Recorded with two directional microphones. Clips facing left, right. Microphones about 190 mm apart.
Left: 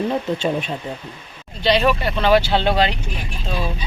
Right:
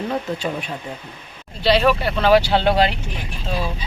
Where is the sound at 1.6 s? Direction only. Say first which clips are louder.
Right 1 dB; 5° right (ahead or behind).